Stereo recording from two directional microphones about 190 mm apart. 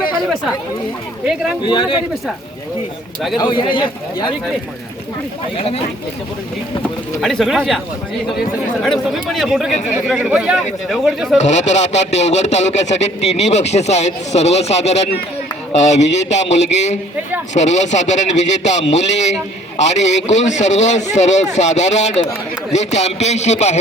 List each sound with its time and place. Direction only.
1.6 s a man's voice: 25° left (ahead or behind)
3.3 s a man's voice: 25° left (ahead or behind)
7.2 s speech: centre (ahead or behind)
11.3 s speech: 40° left (ahead or behind)